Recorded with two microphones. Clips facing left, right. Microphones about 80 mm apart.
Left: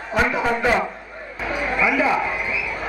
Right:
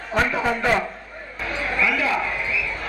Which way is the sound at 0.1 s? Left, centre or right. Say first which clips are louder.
Left 1 dB; centre.